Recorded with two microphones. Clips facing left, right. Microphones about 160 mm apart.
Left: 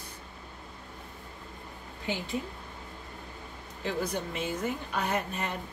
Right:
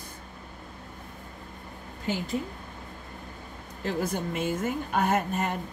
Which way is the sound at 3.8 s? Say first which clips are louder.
Right 3 dB; 50° right (ahead or behind).